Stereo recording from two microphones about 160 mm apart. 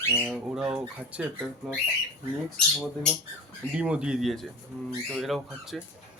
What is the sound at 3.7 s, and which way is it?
Speech, 5° right (ahead or behind).